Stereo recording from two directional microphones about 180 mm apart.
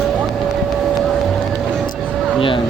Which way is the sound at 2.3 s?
30° left (ahead or behind).